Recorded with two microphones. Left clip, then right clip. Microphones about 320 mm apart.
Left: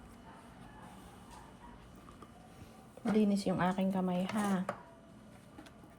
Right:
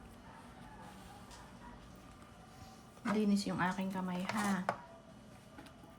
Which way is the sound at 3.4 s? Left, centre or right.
Centre.